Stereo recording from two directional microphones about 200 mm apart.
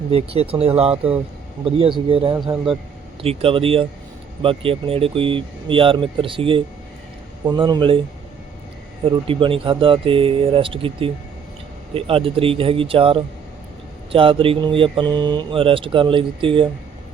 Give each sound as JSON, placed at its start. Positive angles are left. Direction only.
{"t": 0.1, "sound": "speech", "side_deg": -30}
{"t": 9.0, "sound": "speech", "side_deg": -25}